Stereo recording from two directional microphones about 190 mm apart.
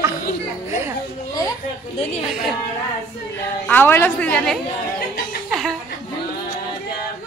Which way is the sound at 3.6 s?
10° left (ahead or behind).